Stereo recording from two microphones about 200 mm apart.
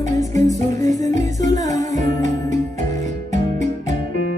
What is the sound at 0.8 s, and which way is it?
Music, 35° right (ahead or behind).